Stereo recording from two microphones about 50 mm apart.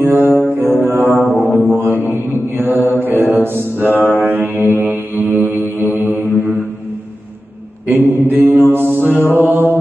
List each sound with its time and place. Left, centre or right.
0.0 s mantra: right
7.8 s mantra: right